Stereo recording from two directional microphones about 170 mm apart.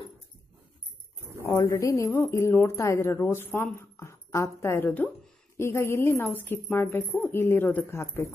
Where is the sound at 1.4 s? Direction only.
15° left (ahead or behind).